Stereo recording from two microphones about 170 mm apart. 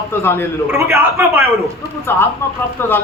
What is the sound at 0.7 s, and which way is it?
Speech, 15° right (ahead or behind).